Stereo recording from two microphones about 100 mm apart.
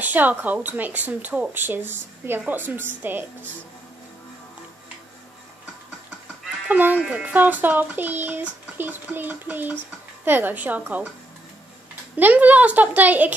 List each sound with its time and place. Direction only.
0.0 s speech: 15° right (ahead or behind)
6.7 s speech: 15° right (ahead or behind)
8.7 s a sound: 20° right (ahead or behind)
10.2 s speech: 20° right (ahead or behind)
12.2 s speech: 15° right (ahead or behind)